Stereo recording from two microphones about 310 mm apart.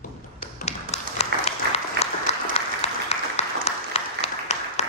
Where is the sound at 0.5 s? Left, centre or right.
Left.